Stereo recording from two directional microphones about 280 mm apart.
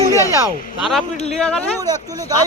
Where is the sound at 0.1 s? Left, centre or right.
Centre.